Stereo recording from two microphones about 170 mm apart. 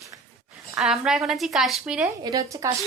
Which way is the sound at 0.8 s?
5° right (ahead or behind).